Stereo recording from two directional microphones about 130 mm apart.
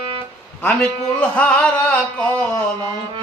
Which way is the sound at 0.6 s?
10° left (ahead or behind).